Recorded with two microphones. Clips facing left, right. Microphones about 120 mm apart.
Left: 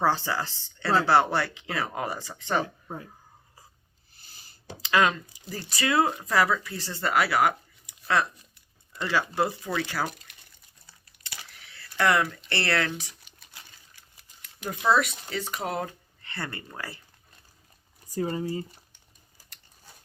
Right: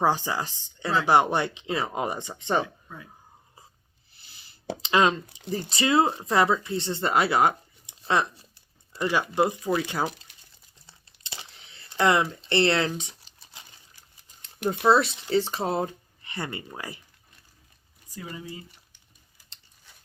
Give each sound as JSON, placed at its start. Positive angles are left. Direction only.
{"t": 0.0, "sound": "speech", "side_deg": -15}
{"t": 2.8, "sound": "speech", "side_deg": 40}
{"t": 4.1, "sound": "plop", "side_deg": 45}
{"t": 4.8, "sound": "speech", "side_deg": -25}
{"t": 10.8, "sound": "a sound", "side_deg": -25}
{"t": 13.0, "sound": "crumpling", "side_deg": -25}
{"t": 14.7, "sound": "speech", "side_deg": -30}
{"t": 16.2, "sound": "speech", "side_deg": -15}
{"t": 18.1, "sound": "speech", "side_deg": 40}